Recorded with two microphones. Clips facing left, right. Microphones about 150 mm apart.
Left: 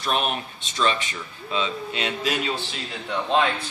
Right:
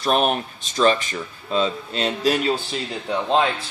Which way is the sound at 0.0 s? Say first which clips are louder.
Right 6 dB; 40° right (ahead or behind).